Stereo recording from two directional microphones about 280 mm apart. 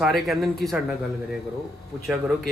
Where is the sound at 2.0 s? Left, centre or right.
Centre.